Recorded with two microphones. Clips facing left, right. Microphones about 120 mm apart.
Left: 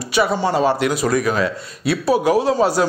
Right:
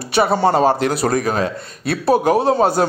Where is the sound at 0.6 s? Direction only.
40° right (ahead or behind).